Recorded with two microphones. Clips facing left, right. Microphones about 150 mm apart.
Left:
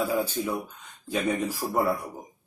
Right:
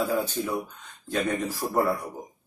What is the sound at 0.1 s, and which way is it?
Speech, 5° left (ahead or behind).